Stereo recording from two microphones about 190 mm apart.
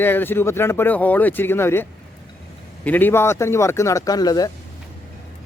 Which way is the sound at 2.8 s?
10° left (ahead or behind).